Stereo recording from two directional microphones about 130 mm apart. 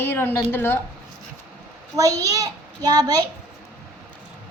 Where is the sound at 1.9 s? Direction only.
25° right (ahead or behind).